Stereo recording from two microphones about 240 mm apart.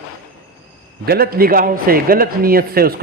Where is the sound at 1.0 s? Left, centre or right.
Right.